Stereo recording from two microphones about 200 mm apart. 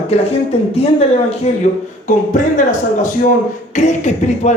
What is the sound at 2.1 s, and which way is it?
Speech, 40° left (ahead or behind).